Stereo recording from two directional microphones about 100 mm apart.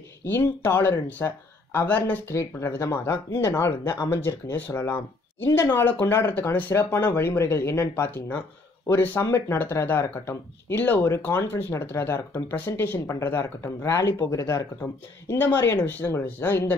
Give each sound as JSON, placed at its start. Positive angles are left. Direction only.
{"t": 0.2, "sound": "speech", "side_deg": 25}
{"t": 14.8, "sound": "speech", "side_deg": 20}